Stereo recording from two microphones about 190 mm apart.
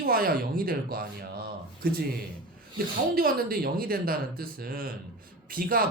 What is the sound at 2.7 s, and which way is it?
Speech, 50° right (ahead or behind).